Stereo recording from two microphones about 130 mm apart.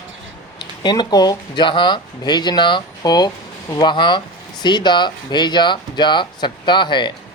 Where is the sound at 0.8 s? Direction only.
35° left (ahead or behind).